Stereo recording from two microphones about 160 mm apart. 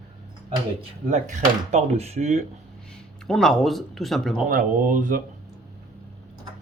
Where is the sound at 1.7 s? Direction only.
40° right (ahead or behind).